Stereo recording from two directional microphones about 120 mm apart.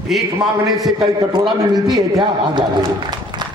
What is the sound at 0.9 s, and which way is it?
A man's voice, 40° right (ahead or behind).